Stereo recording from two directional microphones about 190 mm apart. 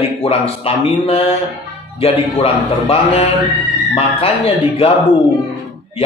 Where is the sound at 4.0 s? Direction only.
30° left (ahead or behind).